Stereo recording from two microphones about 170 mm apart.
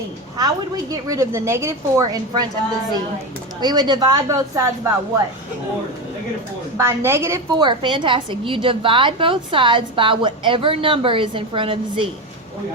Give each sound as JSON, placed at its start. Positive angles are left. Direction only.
{"t": 0.3, "sound": "a woman's voice", "side_deg": -20}
{"t": 3.6, "sound": "a woman's voice", "side_deg": -25}
{"t": 6.7, "sound": "a woman's voice", "side_deg": -15}